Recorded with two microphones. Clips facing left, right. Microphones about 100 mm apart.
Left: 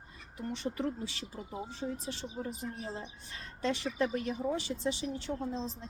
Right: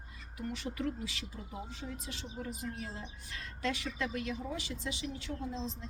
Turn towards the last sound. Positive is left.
turn(degrees=40)  # may be behind; listen again after turning